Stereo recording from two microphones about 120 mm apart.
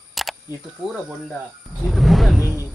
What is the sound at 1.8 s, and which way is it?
Vehicle, centre (ahead or behind).